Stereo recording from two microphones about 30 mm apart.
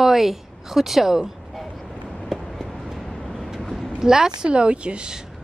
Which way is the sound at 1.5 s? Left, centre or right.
Centre.